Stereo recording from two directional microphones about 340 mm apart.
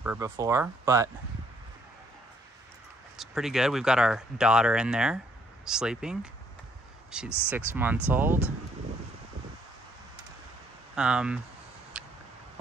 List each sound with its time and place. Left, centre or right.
0.0 s speech: centre
3.2 s speech: centre
11.0 s speech: centre
11.9 s a sound: centre